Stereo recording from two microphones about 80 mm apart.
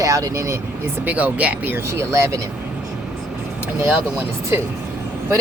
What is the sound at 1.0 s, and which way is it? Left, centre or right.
Speech, centre.